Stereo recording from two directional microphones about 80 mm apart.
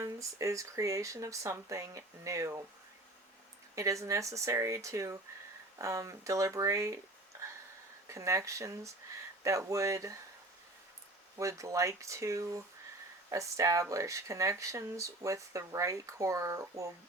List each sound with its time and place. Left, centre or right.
0.0 s speech: right
3.8 s speech: right
8.1 s speech: right
11.3 s speech: right